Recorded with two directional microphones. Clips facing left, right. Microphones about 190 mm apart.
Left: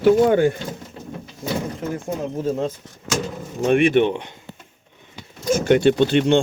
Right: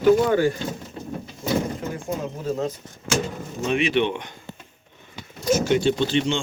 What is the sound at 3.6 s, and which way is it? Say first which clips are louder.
Speech: left 6 dB; 55° left (ahead or behind).